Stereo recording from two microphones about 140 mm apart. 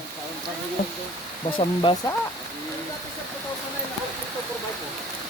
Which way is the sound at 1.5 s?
40° left (ahead or behind).